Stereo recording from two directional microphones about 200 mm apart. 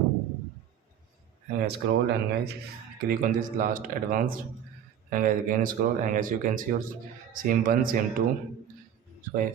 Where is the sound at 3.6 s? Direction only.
40° right (ahead or behind).